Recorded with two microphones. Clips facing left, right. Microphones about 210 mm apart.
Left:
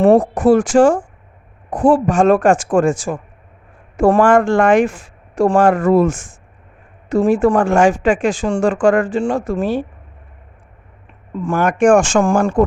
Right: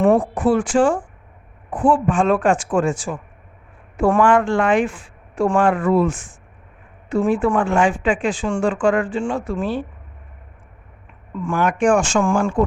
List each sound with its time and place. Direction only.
0.0 s speech: 40° left (ahead or behind)
11.3 s speech: 40° left (ahead or behind)